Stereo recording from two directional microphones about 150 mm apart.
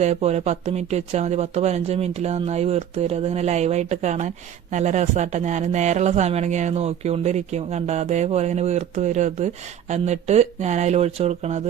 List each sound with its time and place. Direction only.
0.0 s speech: 50° right (ahead or behind)